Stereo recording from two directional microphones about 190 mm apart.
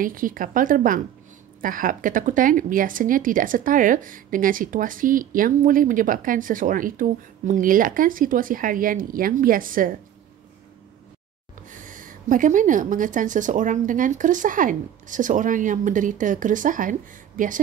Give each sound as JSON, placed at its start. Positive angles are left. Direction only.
{"t": 0.0, "sound": "speech", "side_deg": -45}
{"t": 11.7, "sound": "speech", "side_deg": -45}